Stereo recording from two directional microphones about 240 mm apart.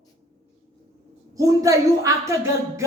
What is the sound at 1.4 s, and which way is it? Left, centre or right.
A woman's voice, centre.